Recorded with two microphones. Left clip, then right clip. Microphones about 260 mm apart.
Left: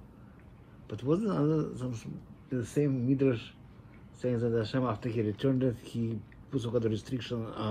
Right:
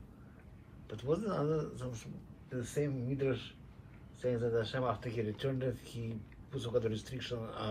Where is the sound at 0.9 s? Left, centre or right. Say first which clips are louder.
Left 4 dB; left.